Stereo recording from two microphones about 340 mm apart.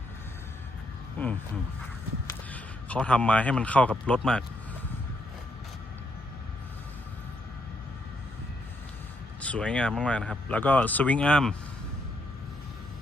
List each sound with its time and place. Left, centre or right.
1.2 s a sound: centre
2.5 s speech: centre
9.4 s speech: centre